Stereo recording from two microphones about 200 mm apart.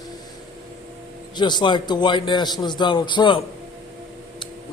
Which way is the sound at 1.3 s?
20° left (ahead or behind).